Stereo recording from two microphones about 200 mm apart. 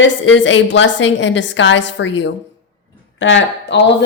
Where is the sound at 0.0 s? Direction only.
70° left (ahead or behind).